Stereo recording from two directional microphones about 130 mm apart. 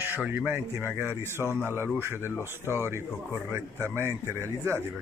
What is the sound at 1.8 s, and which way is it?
Speech, 15° right (ahead or behind).